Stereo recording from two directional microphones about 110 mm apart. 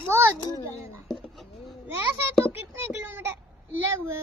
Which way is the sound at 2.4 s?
20° right (ahead or behind).